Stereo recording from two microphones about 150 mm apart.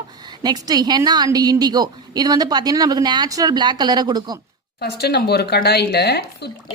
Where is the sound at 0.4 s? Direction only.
25° right (ahead or behind).